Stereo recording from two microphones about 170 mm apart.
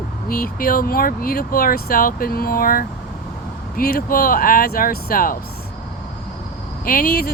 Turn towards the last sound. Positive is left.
turn(degrees=60)  # may be behind; listen again after turning